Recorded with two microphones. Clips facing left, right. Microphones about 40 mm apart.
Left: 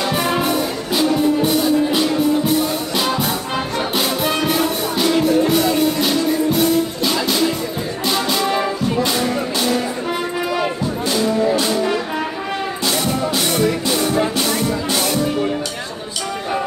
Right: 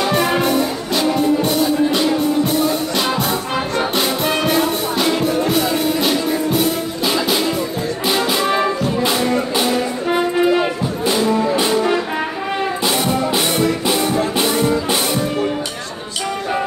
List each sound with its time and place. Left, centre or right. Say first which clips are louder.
0.0 s music: right 2 dB; centre
7.1 s music: right 5 dB; centre